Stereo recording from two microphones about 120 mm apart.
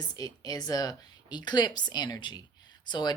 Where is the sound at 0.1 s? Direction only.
35° left (ahead or behind).